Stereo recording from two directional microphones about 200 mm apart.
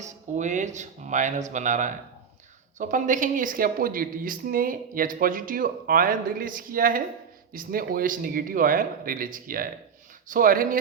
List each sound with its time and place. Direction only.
0.0 s speech: 35° right (ahead or behind)